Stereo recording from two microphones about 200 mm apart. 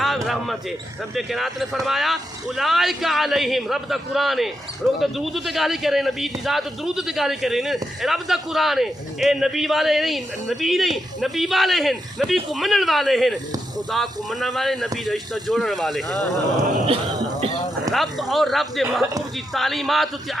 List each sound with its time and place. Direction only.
0.0 s basketball bounce: centre (ahead or behind)
1.1 s a man's voice: centre (ahead or behind)
16.9 s speech: 25° right (ahead or behind)
17.9 s a man's voice: centre (ahead or behind)